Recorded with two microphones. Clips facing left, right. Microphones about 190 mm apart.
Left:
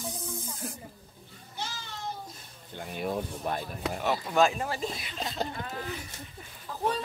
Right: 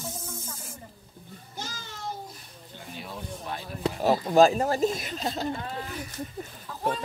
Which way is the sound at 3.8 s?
35° right (ahead or behind).